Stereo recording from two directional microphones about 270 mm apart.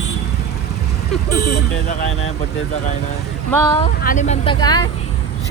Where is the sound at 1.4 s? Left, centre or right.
Left.